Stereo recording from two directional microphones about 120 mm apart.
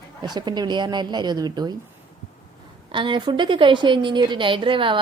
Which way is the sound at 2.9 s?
40° right (ahead or behind).